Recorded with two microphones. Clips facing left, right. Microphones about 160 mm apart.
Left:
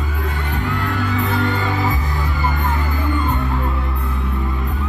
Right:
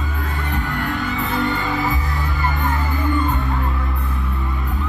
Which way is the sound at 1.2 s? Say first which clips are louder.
Left 2 dB; centre (ahead or behind).